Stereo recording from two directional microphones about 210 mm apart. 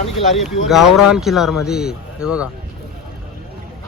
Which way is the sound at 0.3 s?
Centre (ahead or behind).